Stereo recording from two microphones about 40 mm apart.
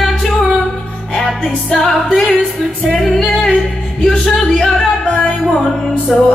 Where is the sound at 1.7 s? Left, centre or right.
Centre.